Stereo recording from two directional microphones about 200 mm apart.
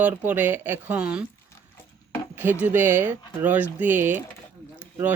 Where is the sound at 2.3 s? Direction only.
10° right (ahead or behind).